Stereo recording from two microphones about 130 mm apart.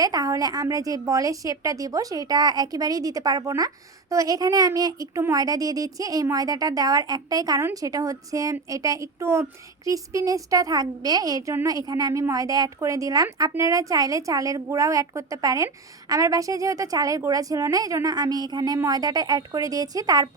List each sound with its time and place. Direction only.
0.0 s a woman's voice: 30° right (ahead or behind)